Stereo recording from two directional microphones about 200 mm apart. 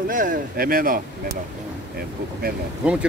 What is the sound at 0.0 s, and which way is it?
Speech, 45° right (ahead or behind).